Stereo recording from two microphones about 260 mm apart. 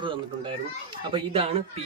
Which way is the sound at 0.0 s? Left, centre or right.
Centre.